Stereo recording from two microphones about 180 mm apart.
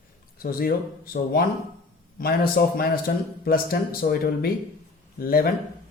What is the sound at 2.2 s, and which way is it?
Speech, 55° left (ahead or behind).